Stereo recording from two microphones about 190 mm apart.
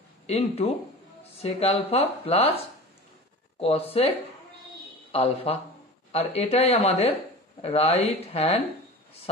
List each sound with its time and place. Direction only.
0.3 s speech: 35° left (ahead or behind)
5.1 s speech: 30° left (ahead or behind)